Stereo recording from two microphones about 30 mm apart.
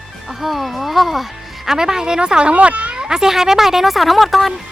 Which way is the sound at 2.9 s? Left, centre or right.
Right.